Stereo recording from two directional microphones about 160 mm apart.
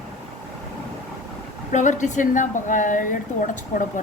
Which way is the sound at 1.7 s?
50° left (ahead or behind).